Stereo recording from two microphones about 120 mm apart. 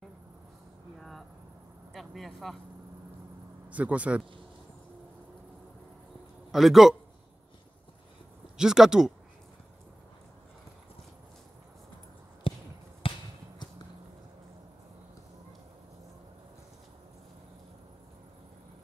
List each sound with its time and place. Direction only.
0.9 s a sound: centre (ahead or behind)
2.0 s speech: centre (ahead or behind)
3.7 s speech: 10° right (ahead or behind)
6.5 s speech: centre (ahead or behind)
8.5 s speech: 5° right (ahead or behind)
12.5 s basketball bounce: 45° left (ahead or behind)
13.0 s a sound: 50° left (ahead or behind)